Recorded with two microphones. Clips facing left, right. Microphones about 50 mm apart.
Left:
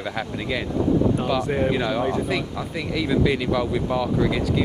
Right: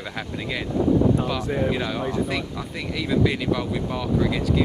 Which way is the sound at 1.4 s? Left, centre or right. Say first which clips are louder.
Left 2 dB; left.